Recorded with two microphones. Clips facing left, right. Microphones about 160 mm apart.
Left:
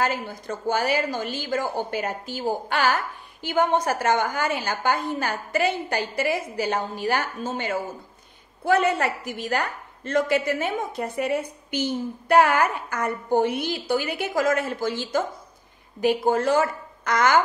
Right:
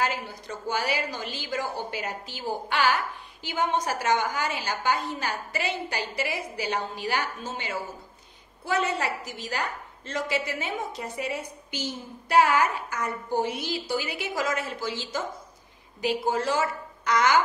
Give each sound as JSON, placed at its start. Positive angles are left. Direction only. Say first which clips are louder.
{"t": 0.0, "sound": "a woman's voice", "louder": "left 3 dB", "side_deg": 50}